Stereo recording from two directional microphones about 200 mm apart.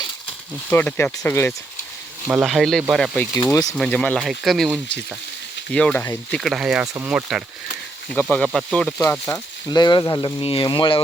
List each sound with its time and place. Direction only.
0.7 s speech: 10° left (ahead or behind)
2.2 s speech: 5° right (ahead or behind)
3.3 s speech: 20° left (ahead or behind)
3.8 s speech: 5° left (ahead or behind)
6.4 s speech: 5° right (ahead or behind); by 11.0 s 25° left (ahead or behind)